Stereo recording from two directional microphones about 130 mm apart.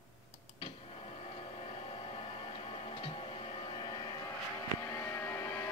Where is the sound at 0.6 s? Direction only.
50° left (ahead or behind).